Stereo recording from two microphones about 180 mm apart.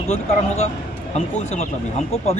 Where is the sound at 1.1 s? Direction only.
35° left (ahead or behind).